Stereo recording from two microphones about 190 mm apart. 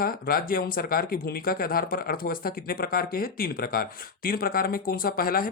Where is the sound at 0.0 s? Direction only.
50° left (ahead or behind).